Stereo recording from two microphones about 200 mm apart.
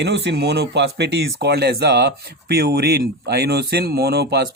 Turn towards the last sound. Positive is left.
turn(degrees=-55)  # may be behind; listen again after turning